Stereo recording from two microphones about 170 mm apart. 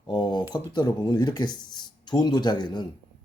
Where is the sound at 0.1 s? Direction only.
25° left (ahead or behind).